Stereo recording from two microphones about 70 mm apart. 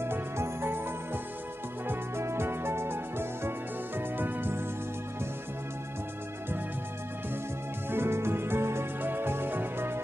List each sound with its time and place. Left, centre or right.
0.0 s music: right
7.9 s music: right